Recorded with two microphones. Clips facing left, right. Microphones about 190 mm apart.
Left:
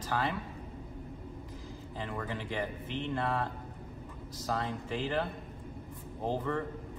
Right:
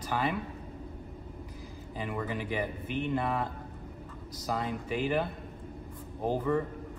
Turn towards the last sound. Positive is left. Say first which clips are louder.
# right 4 dB
turn(degrees=-10)  # may be behind; listen again after turning